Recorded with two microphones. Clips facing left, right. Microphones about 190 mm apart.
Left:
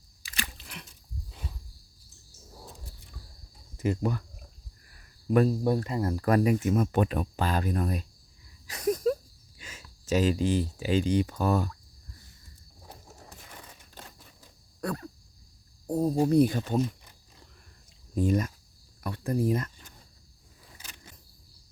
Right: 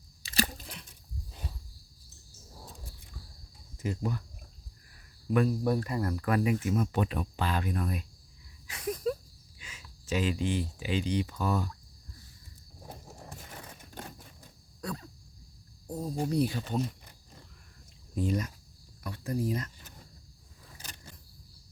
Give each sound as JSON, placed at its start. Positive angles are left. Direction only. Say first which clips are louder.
{"t": 0.3, "sound": "a sound", "louder": "right 8 dB", "side_deg": -40}
{"t": 3.8, "sound": "speech", "louder": "left 5 dB", "side_deg": 65}
{"t": 5.3, "sound": "speech", "louder": "left 4 dB", "side_deg": 40}
{"t": 5.6, "sound": "speech", "louder": "left 2 dB", "side_deg": 25}
{"t": 6.2, "sound": "speech", "louder": "left 5 dB", "side_deg": 40}
{"t": 8.6, "sound": "a sound", "louder": "left 6 dB", "side_deg": 40}
{"t": 9.6, "sound": "speech", "louder": "left 4 dB", "side_deg": 45}
{"t": 14.8, "sound": "a sound", "louder": "left 5 dB", "side_deg": 60}
{"t": 15.9, "sound": "speech", "louder": "left 8 dB", "side_deg": 60}
{"t": 18.1, "sound": "speech", "louder": "left 5 dB", "side_deg": 45}